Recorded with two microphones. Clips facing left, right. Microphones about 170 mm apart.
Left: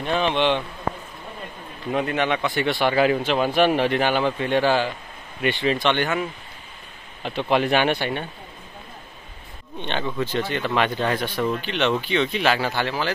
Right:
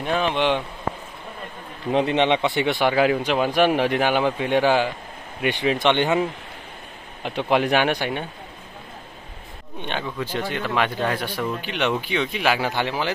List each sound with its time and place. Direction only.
0.0 s speech: 5° right (ahead or behind)
1.9 s speech: 25° right (ahead or behind)
7.2 s speech: 10° right (ahead or behind)
9.8 s speech: 5° right (ahead or behind)